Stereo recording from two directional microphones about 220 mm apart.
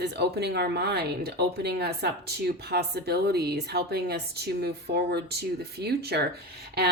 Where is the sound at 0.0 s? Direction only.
45° right (ahead or behind).